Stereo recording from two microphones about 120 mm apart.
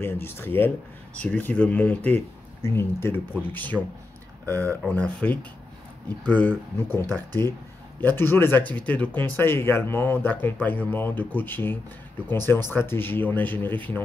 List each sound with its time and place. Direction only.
0.0 s speech: 20° left (ahead or behind)